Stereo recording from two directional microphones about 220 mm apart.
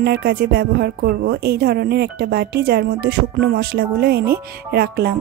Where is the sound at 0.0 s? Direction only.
45° right (ahead or behind).